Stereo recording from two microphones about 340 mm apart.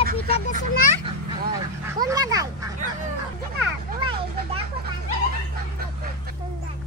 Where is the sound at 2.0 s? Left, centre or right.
Centre.